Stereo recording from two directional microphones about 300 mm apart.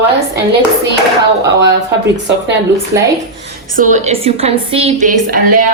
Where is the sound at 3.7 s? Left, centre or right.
Right.